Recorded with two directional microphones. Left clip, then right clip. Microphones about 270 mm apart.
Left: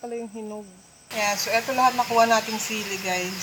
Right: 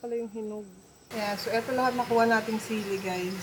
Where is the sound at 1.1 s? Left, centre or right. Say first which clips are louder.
Left 6 dB; centre.